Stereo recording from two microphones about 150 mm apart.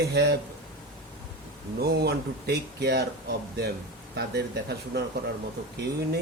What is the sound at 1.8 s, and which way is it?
Speech, 90° right.